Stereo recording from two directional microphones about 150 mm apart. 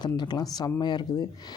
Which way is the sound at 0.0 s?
30° left (ahead or behind).